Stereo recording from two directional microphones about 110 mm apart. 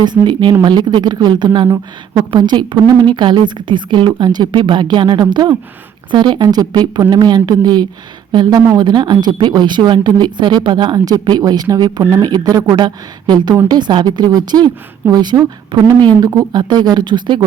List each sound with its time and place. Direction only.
0.0 s a woman's voice: 40° right (ahead or behind)